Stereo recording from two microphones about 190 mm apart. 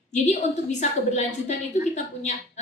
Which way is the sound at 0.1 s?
40° left (ahead or behind).